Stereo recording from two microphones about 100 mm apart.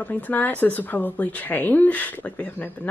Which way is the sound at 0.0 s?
15° left (ahead or behind).